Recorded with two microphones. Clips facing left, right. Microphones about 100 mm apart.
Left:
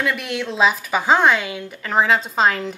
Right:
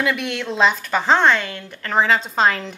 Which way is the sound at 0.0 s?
Centre (ahead or behind).